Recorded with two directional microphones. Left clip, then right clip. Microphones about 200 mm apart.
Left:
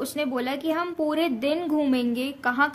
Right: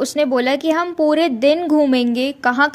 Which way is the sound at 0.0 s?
30° right (ahead or behind).